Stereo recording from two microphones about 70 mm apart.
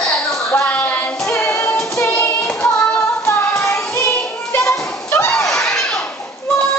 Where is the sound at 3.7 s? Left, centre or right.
Left.